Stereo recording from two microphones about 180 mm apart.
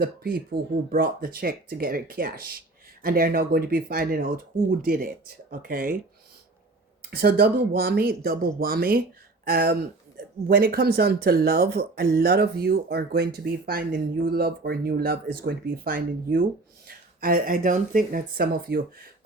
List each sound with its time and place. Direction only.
0.0 s speech: 55° right (ahead or behind)
7.1 s speech: 60° right (ahead or behind)